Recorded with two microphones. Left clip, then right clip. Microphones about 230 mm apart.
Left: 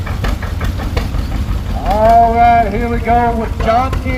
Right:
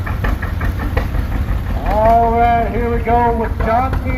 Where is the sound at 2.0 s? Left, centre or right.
Left.